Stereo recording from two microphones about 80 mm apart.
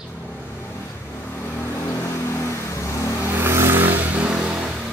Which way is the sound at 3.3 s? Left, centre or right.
Right.